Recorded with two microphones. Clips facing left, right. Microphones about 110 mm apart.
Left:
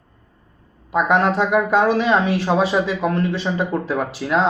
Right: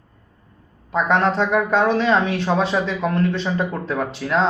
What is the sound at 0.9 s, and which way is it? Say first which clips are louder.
Speech: left 1 dB; 10° left (ahead or behind).